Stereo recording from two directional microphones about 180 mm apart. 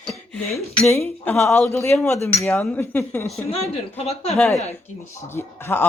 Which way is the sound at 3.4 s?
35° left (ahead or behind).